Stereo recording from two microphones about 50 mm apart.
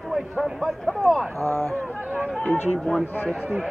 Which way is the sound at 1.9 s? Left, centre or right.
Right.